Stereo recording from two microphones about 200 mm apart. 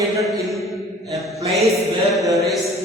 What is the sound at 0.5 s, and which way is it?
Mantra, centre (ahead or behind).